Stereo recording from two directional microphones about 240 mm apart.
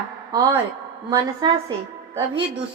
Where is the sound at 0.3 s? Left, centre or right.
Centre.